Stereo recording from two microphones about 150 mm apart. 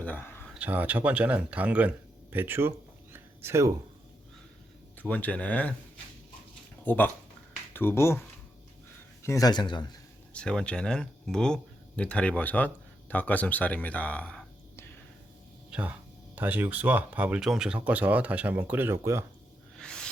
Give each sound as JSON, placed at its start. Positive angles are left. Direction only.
{"t": 0.0, "sound": "a sound", "side_deg": 15}
{"t": 0.6, "sound": "speech", "side_deg": -10}
{"t": 4.9, "sound": "speech", "side_deg": 10}
{"t": 6.8, "sound": "speech", "side_deg": 10}
{"t": 9.2, "sound": "speech", "side_deg": 20}
{"t": 10.3, "sound": "speech", "side_deg": 5}
{"t": 15.7, "sound": "speech", "side_deg": -10}
{"t": 19.7, "sound": "snake", "side_deg": 5}